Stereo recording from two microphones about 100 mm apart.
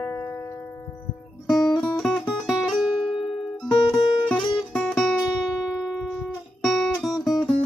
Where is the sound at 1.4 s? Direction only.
Centre (ahead or behind).